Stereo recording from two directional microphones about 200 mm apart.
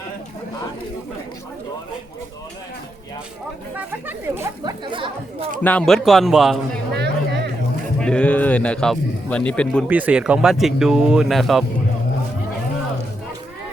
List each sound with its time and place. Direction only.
3.8 s speech: 10° right (ahead or behind)
4.6 s speech: 25° right (ahead or behind)
5.6 s speech: 5° left (ahead or behind)
6.9 s a sound: 55° right (ahead or behind)
8.0 s speech: 5° left (ahead or behind)
9.8 s speech: 5° right (ahead or behind)